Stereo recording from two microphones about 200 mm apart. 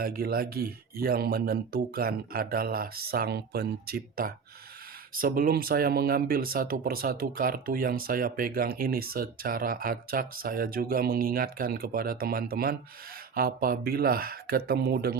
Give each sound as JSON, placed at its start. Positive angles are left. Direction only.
{"t": 0.0, "sound": "speech", "side_deg": -50}